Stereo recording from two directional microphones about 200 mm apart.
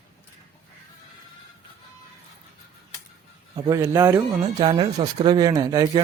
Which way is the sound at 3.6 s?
20° right (ahead or behind).